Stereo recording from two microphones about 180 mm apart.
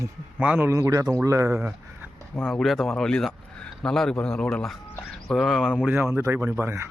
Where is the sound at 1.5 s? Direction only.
10° right (ahead or behind).